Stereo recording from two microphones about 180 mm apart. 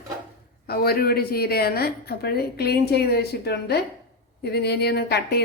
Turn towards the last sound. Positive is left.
turn(degrees=65)  # may be behind; listen again after turning